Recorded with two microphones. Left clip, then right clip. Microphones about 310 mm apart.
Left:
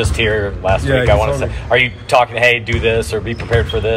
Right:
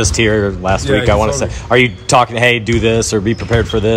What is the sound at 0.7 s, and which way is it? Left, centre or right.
Speech, right.